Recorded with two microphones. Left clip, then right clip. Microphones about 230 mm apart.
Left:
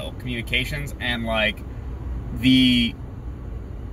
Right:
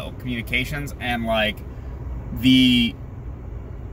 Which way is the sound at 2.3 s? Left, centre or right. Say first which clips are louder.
Right 1 dB; right.